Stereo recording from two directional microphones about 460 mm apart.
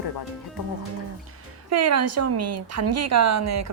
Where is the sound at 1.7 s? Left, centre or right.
Right.